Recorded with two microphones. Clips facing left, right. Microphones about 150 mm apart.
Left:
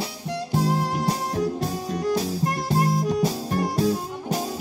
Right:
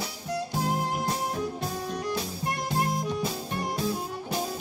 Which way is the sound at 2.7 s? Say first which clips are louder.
Left 6 dB; 40° left (ahead or behind).